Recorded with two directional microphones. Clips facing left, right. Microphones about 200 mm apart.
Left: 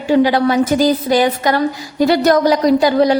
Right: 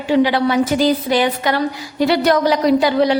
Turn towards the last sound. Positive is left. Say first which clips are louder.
# left 2 dB
turn(degrees=40)  # may be behind; listen again after turning